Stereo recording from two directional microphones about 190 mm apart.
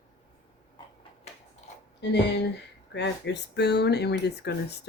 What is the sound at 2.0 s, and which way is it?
Speech, 65° left (ahead or behind).